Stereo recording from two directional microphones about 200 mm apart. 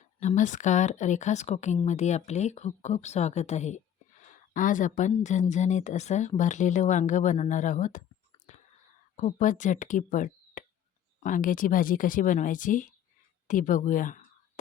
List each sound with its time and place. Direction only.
0.0 s speech: 40° left (ahead or behind)
8.5 s whispering: 35° left (ahead or behind)
9.1 s speech: 40° left (ahead or behind)